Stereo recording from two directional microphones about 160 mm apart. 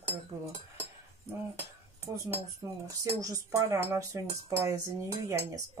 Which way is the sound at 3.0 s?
20° right (ahead or behind).